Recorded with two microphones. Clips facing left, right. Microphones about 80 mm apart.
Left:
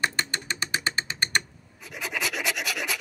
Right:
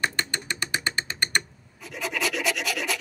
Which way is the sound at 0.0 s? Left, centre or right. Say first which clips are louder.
Even; left.